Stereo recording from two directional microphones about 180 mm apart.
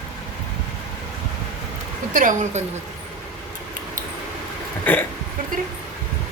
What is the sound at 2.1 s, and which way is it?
Speech, 40° right (ahead or behind).